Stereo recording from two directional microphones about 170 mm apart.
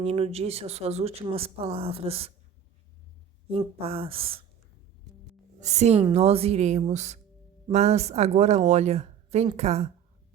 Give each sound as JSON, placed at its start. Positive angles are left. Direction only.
{"t": 0.0, "sound": "speech", "side_deg": -35}
{"t": 3.5, "sound": "speech", "side_deg": -35}
{"t": 5.5, "sound": "speech", "side_deg": -45}